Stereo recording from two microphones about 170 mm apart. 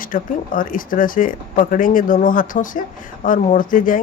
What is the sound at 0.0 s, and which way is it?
Speech, 55° left (ahead or behind).